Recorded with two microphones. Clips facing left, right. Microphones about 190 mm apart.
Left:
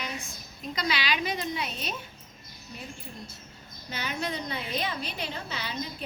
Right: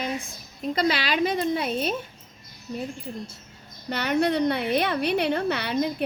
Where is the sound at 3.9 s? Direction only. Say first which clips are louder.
Right 10 dB; 65° right (ahead or behind).